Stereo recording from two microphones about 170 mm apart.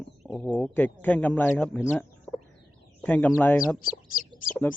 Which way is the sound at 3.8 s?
55° left (ahead or behind).